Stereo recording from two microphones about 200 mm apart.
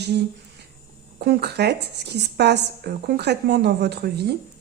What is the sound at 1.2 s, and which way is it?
A woman's voice, 55° right (ahead or behind).